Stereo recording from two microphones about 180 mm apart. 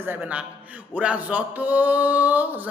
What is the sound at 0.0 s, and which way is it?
A man's voice, 10° right (ahead or behind).